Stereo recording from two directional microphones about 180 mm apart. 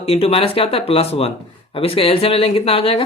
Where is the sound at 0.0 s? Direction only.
30° left (ahead or behind).